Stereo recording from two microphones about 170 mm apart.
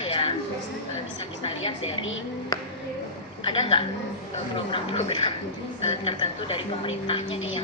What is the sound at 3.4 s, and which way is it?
A woman's voice, 30° left (ahead or behind).